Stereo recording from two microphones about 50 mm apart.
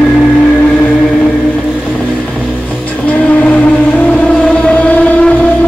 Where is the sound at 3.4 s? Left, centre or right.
Left.